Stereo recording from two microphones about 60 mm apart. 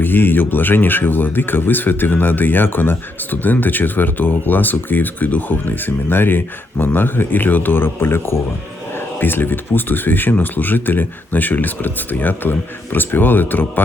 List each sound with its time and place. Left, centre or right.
0.0 s speech: left